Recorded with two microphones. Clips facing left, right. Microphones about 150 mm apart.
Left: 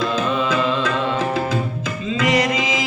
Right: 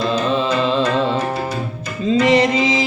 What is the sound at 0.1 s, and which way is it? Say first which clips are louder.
Music: right 2 dB; 30° right (ahead or behind).